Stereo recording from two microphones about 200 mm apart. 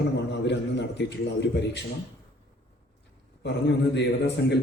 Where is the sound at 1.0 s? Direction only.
60° left (ahead or behind).